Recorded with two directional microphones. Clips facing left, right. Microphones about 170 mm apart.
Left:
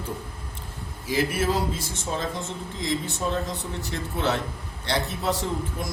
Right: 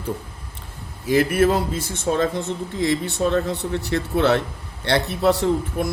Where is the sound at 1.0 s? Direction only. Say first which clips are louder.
Right 7 dB; 55° right (ahead or behind).